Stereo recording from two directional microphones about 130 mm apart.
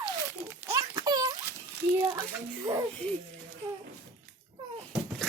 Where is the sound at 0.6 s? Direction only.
25° right (ahead or behind).